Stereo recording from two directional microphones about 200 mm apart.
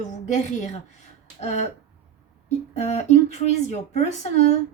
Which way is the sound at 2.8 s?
35° left (ahead or behind).